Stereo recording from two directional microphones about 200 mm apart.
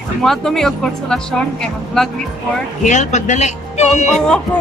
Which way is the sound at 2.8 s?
35° left (ahead or behind).